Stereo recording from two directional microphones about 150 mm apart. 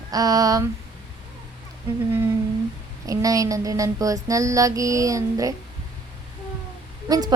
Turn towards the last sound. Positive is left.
turn(degrees=-25)  # may be behind; listen again after turning